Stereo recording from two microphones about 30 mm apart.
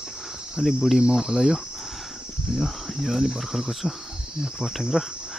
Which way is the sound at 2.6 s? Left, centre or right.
Centre.